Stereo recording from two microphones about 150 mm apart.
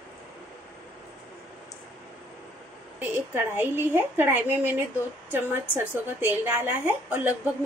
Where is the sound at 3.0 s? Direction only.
15° right (ahead or behind).